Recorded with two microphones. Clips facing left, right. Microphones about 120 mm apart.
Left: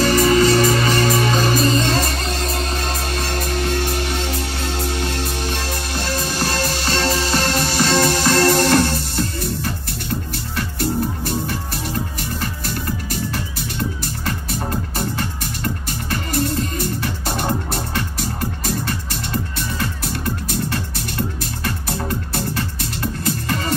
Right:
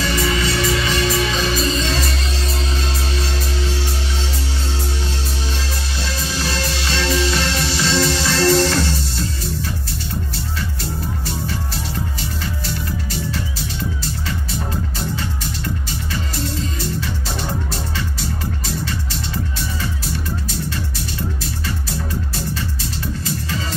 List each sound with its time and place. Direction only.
0.0 s music: 45° left (ahead or behind)
5.9 s music: 50° left (ahead or behind)
10.8 s music: 55° left (ahead or behind)